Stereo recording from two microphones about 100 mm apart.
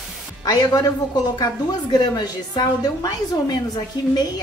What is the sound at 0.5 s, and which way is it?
A woman's voice, 40° left (ahead or behind).